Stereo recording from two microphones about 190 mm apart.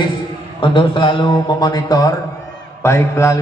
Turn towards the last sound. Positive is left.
turn(degrees=15)  # may be behind; listen again after turning